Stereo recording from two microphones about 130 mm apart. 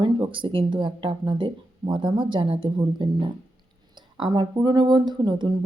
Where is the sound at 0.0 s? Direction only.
40° right (ahead or behind).